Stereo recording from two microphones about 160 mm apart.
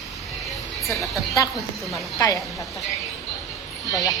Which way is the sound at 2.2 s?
25° left (ahead or behind).